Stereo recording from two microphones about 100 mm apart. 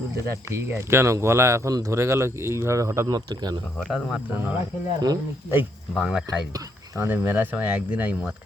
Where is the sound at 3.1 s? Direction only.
45° right (ahead or behind).